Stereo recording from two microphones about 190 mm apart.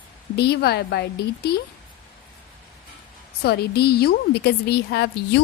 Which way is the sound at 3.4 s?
60° left (ahead or behind).